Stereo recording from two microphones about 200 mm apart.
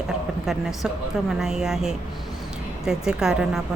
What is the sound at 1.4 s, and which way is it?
Speech, centre (ahead or behind).